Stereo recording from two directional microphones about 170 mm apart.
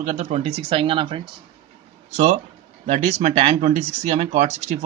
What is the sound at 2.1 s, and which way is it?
Speech, 45° right (ahead or behind).